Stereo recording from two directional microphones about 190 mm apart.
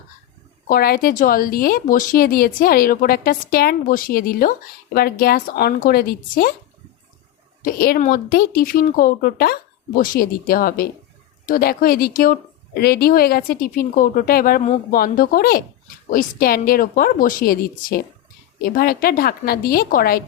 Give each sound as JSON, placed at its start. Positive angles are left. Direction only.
{"t": 0.7, "sound": "a woman's voice", "side_deg": 50}
{"t": 7.6, "sound": "a woman's voice", "side_deg": 50}